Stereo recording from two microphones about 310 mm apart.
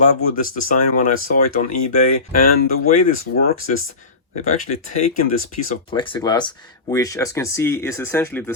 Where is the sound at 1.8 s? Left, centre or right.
Left.